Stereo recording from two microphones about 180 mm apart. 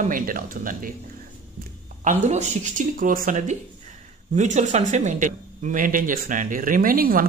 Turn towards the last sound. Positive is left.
turn(degrees=-55)  # may be behind; listen again after turning